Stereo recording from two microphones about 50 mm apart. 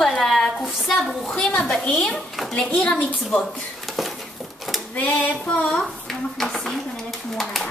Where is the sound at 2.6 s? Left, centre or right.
Left.